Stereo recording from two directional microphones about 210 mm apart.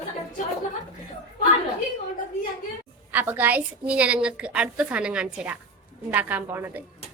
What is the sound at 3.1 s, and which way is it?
A woman's voice, 10° right (ahead or behind).